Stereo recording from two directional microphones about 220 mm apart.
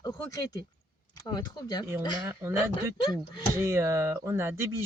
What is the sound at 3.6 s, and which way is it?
Speech, 10° right (ahead or behind).